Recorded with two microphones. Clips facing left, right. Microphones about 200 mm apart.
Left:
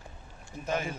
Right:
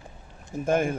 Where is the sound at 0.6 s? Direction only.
50° right (ahead or behind).